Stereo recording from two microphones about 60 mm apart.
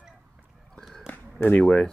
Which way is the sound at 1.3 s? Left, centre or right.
Left.